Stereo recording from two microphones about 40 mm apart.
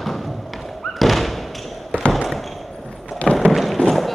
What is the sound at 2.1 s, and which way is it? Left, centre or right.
Basketball bounce, centre.